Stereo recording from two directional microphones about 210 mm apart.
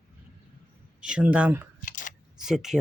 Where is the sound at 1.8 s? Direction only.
40° left (ahead or behind).